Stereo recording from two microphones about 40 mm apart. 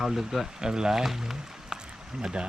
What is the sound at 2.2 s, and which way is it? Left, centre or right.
Speech, right.